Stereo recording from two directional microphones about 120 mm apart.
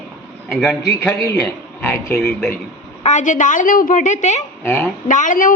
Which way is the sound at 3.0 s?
85° left.